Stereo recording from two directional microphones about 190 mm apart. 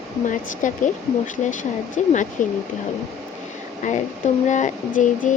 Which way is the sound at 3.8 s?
40° left (ahead or behind).